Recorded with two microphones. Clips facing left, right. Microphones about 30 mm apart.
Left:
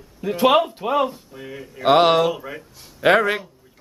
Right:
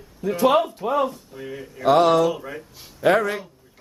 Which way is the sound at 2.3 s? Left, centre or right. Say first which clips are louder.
Left 1 dB; centre.